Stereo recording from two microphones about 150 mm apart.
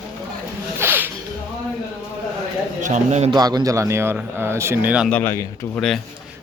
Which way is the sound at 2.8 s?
50° right (ahead or behind).